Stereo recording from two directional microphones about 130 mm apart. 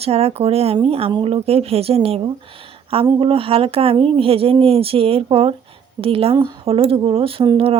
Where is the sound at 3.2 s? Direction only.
45° right (ahead or behind).